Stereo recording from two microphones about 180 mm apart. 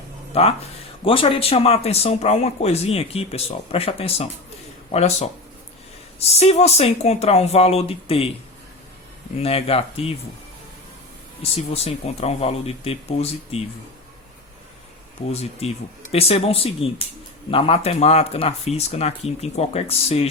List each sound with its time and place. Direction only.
0.3 s speech: 35° left (ahead or behind)
9.4 s speech: 35° left (ahead or behind)
11.5 s speech: 35° left (ahead or behind)
15.3 s speech: 35° left (ahead or behind)